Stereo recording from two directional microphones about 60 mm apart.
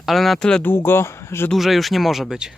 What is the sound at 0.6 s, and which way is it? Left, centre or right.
Speech, left.